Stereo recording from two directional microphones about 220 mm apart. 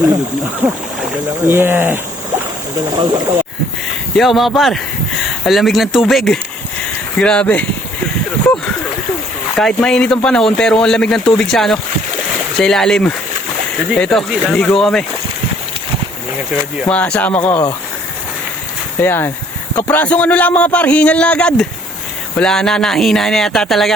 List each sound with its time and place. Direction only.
0.6 s speech: 10° right (ahead or behind)
2.9 s speech: 20° right (ahead or behind)
4.1 s a man's voice: centre (ahead or behind)
9.6 s a man's voice: centre (ahead or behind)
16.8 s speech: 5° left (ahead or behind)
18.9 s a man's voice: 10° left (ahead or behind)